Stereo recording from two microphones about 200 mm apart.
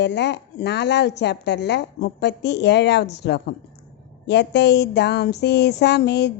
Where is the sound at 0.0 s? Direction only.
60° left (ahead or behind).